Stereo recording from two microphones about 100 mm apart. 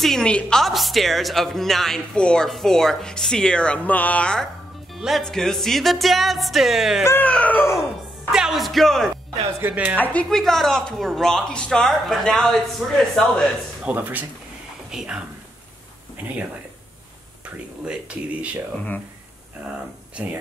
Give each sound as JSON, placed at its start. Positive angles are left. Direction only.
{"t": 0.0, "sound": "a woman's voice", "side_deg": 5}
{"t": 4.9, "sound": "a woman's voice", "side_deg": 0}
{"t": 7.1, "sound": "speech", "side_deg": 15}
{"t": 8.3, "sound": "a woman's voice", "side_deg": -5}
{"t": 9.6, "sound": "speech", "side_deg": -20}
{"t": 9.9, "sound": "speech", "side_deg": 15}
{"t": 10.3, "sound": "a woman's voice", "side_deg": 5}
{"t": 13.8, "sound": "speech", "side_deg": -20}
{"t": 14.9, "sound": "speech", "side_deg": -5}
{"t": 17.8, "sound": "speech", "side_deg": -15}
{"t": 20.2, "sound": "speech", "side_deg": -10}